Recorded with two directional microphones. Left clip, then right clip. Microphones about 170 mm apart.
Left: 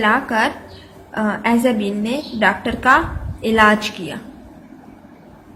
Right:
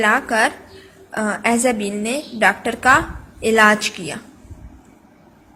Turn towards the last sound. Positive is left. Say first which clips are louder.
# even
turn(degrees=-35)  # may be behind; listen again after turning